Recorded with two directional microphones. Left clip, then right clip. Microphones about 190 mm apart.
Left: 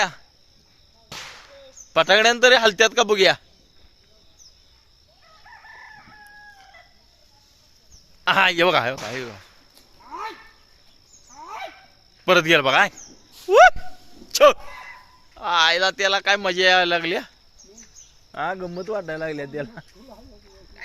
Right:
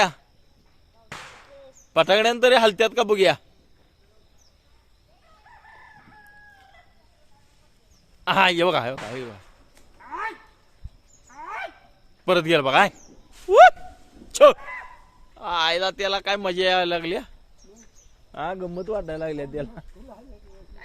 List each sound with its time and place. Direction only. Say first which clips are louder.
1.9 s speech: left 2 dB; 5° right (ahead or behind)
8.2 s speech: left 2 dB; centre (ahead or behind)
12.2 s speech: left 3 dB; centre (ahead or behind)
18.3 s speech: left 3 dB; 10° right (ahead or behind)